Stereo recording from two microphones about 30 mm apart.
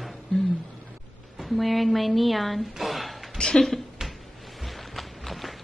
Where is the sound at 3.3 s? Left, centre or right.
Left.